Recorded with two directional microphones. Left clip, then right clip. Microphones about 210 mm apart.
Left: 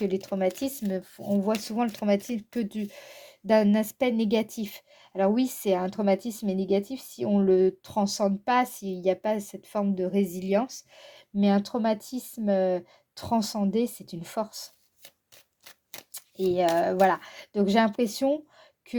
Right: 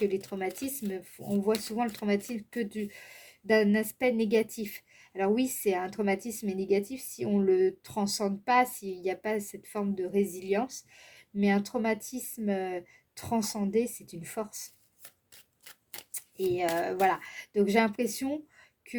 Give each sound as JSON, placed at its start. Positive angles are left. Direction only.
{"t": 0.1, "sound": "speech", "side_deg": 35}
{"t": 16.6, "sound": "speech", "side_deg": 35}